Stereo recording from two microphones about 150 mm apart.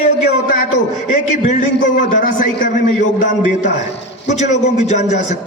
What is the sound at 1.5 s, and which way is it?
A man's voice, 60° left (ahead or behind).